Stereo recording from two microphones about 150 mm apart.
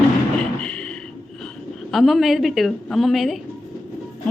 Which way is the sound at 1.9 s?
Centre (ahead or behind).